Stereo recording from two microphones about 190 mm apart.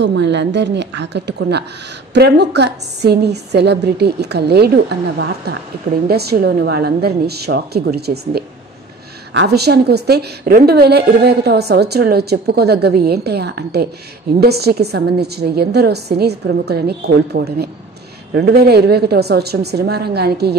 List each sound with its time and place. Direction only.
0.0 s a woman's voice: 65° right (ahead or behind)